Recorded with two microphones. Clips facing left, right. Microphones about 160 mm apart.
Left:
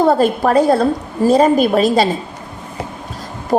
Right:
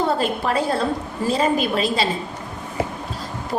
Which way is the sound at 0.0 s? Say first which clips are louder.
Left 8 dB; 45° left (ahead or behind).